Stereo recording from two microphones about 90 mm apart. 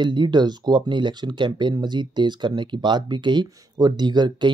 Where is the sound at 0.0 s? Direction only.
55° right (ahead or behind).